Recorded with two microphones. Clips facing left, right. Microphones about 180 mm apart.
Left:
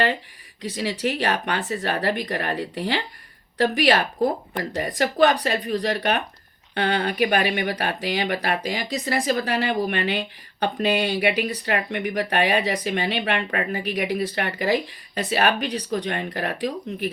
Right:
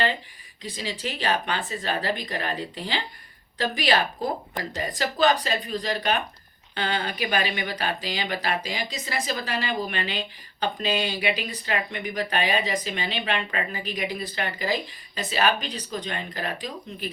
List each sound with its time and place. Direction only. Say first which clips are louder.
0.6 s speech: left 7 dB; 70° left (ahead or behind)